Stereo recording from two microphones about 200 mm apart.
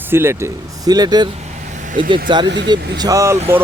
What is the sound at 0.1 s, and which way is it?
Speech, 10° right (ahead or behind).